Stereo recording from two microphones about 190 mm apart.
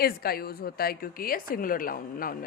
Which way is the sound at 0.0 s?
55° left (ahead or behind).